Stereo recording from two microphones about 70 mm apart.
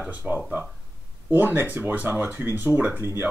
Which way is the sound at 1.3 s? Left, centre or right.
Right.